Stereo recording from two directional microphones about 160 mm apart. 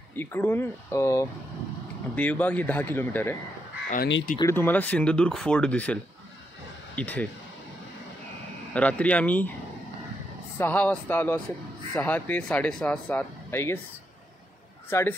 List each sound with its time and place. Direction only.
0.1 s speech: 15° left (ahead or behind)
3.9 s speech: 60° left (ahead or behind)
4.4 s speech: 15° left (ahead or behind)
7.0 s speech: 10° left (ahead or behind)
8.7 s speech: 10° left (ahead or behind)
10.6 s speech: 10° left (ahead or behind)
14.9 s speech: 15° left (ahead or behind)